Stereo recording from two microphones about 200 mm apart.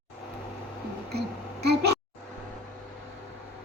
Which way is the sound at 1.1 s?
55° right (ahead or behind).